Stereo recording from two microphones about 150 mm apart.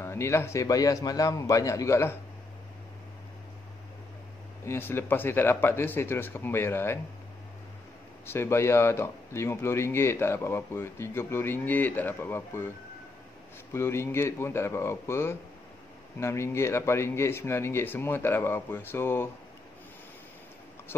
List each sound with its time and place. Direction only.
0.0 s a man's voice: 15° left (ahead or behind)
4.6 s speech: 15° left (ahead or behind)
8.3 s speech: 15° left (ahead or behind)
13.7 s speech: 15° left (ahead or behind)